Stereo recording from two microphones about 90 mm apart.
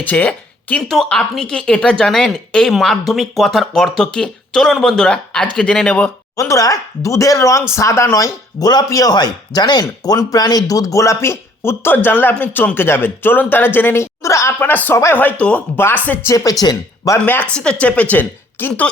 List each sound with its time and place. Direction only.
0.0 s speech: 15° left (ahead or behind)
6.3 s speech: 35° left (ahead or behind)
14.6 s speech: 20° left (ahead or behind)
16.2 s speech: 40° left (ahead or behind)
17.2 s speech: 15° left (ahead or behind)